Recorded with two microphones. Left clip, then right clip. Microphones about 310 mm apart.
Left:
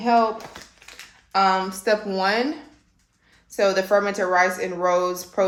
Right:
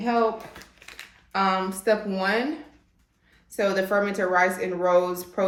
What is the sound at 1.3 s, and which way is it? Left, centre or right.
Speech, centre.